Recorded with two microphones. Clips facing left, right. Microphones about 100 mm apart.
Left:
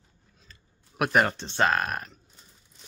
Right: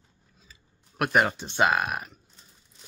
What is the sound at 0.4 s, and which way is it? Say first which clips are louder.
Speech: even; centre (ahead or behind).